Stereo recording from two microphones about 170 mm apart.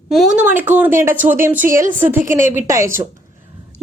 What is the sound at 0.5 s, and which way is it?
Speech, 10° right (ahead or behind).